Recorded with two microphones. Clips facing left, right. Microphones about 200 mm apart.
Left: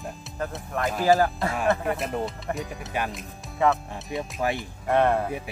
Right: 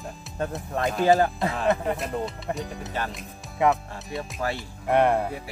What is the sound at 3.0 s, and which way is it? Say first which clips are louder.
Speech: left 2 dB; 15° left (ahead or behind).